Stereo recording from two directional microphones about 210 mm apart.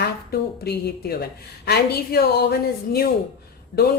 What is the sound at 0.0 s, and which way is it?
Speech, 50° left (ahead or behind).